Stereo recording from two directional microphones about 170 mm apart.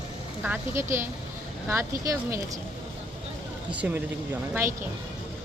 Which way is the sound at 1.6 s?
15° right (ahead or behind).